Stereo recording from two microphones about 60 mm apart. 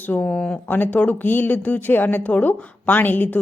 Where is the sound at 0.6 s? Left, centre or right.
Left.